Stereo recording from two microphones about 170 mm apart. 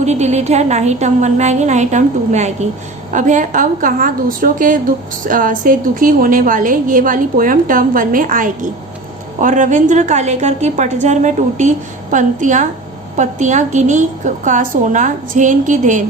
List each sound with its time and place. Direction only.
0.0 s a woman's voice: 40° right (ahead or behind)